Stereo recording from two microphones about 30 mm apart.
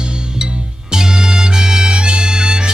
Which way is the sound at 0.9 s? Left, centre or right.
Right.